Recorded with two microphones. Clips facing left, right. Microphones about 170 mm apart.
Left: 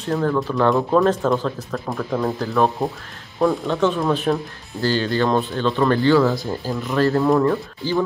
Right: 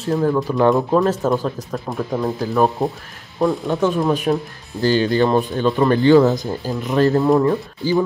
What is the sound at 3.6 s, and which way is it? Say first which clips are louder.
Speech: right 1 dB; 10° right (ahead or behind).